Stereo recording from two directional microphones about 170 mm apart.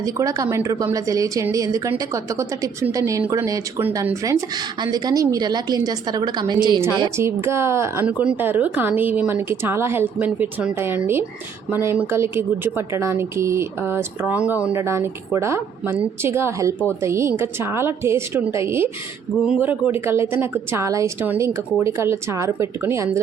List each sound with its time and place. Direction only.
0.0 s a woman's voice: 20° right (ahead or behind)